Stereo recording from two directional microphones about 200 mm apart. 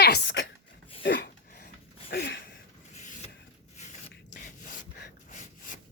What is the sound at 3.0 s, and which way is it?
Rub, 40° left (ahead or behind).